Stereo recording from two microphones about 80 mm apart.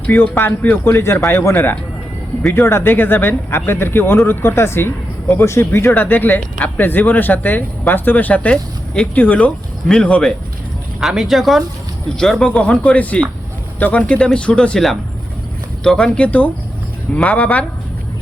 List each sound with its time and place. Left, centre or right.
0.0 s speech: left
11.0 s speech: centre